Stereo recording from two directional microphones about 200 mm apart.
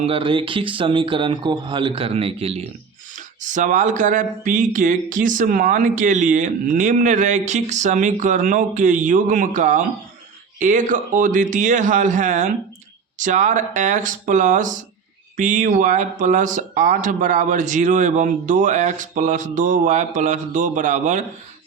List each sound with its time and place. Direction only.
0.0 s speech: 25° right (ahead or behind)
3.2 s speech: 40° right (ahead or behind)